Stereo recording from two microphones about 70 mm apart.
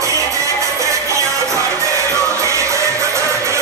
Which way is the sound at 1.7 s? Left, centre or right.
Right.